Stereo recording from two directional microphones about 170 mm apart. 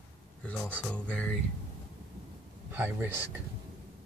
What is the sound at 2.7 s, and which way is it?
Speech, 10° right (ahead or behind).